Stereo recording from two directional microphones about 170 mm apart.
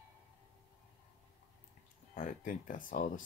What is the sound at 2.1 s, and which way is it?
Speech, 50° left (ahead or behind).